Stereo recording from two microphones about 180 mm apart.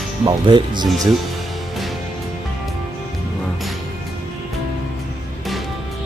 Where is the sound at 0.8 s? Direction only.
Centre (ahead or behind).